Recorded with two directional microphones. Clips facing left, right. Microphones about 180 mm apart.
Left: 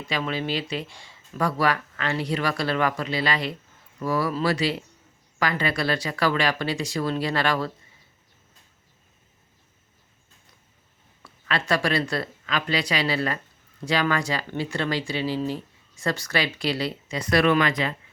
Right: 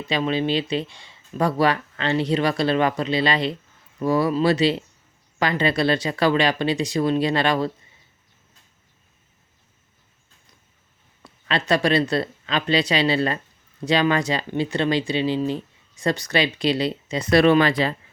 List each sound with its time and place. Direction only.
0.1 s speech: 25° right (ahead or behind)
11.2 s speech: 20° right (ahead or behind)